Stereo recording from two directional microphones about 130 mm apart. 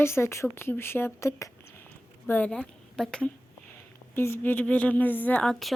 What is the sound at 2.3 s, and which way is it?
A woman's voice, 10° left (ahead or behind).